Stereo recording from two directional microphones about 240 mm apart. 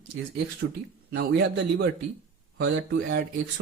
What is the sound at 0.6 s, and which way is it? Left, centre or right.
Speech, right.